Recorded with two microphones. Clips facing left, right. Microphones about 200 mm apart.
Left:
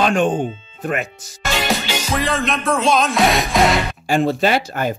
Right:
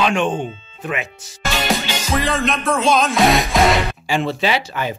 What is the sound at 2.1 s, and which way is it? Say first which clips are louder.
Music: right 1 dB; centre (ahead or behind).